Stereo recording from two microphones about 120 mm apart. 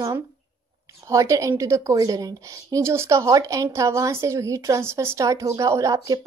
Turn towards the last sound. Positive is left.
turn(degrees=-30)  # may be behind; listen again after turning